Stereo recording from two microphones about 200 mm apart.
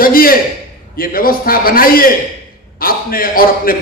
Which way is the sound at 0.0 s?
45° left (ahead or behind).